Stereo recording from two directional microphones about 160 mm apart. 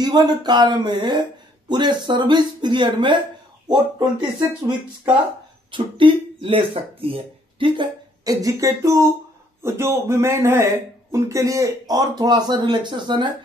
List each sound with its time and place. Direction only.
0.0 s a man's voice: 25° right (ahead or behind)
5.7 s a man's voice: 30° right (ahead or behind)